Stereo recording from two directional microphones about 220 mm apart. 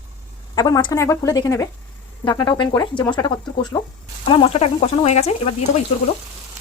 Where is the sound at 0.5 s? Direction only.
15° left (ahead or behind).